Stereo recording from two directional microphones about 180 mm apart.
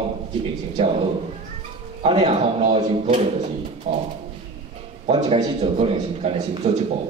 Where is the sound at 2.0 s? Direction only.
35° right (ahead or behind).